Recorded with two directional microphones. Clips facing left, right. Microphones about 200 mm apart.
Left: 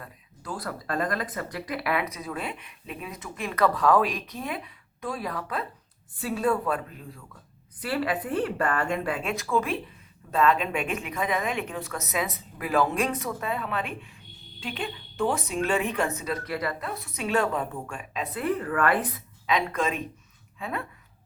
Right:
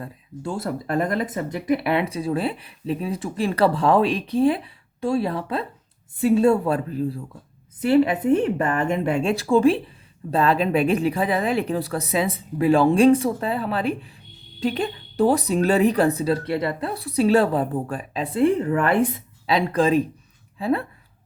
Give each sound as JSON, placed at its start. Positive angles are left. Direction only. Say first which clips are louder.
{"t": 0.0, "sound": "speech", "louder": "right 11 dB", "side_deg": -25}
{"t": 7.8, "sound": "speech", "louder": "right 10 dB", "side_deg": -25}